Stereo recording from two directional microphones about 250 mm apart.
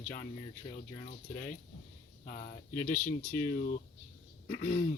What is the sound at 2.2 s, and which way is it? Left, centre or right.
Speech, left.